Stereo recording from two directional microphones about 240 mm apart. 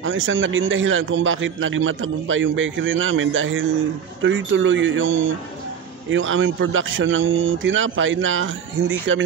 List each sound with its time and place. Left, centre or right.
0.0 s a man's voice: right